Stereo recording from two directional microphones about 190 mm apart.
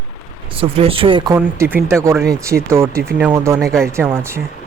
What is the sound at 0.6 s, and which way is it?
Speech, 30° right (ahead or behind).